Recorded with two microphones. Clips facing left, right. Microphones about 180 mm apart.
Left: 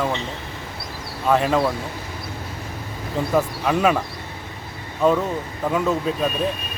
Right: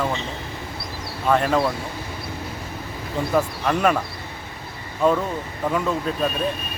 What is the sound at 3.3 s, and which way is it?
Speech, 5° left (ahead or behind).